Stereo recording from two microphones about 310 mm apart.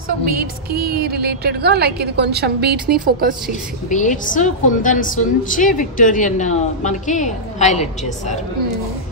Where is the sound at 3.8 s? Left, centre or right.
Left.